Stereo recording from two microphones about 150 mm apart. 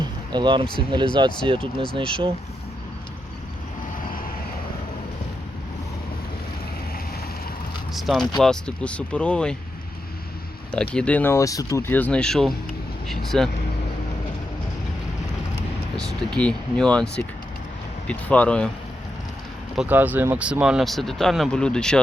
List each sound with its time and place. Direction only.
0.0 s a sound: 30° right (ahead or behind)
0.8 s speech: 35° right (ahead or behind)
7.9 s speech: centre (ahead or behind)
10.7 s speech: 5° left (ahead or behind)
16.0 s speech: 5° left (ahead or behind)
19.7 s speech: 10° right (ahead or behind)